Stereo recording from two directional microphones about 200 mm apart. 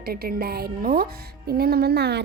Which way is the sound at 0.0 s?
50° right (ahead or behind).